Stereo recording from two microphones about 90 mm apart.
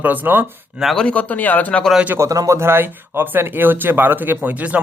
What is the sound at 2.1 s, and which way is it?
Speech, 40° right (ahead or behind).